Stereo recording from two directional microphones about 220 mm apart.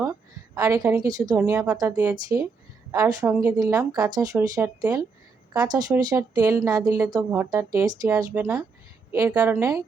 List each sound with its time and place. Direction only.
0.5 s speech: 15° right (ahead or behind)